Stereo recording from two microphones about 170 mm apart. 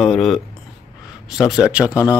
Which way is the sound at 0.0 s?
Centre (ahead or behind).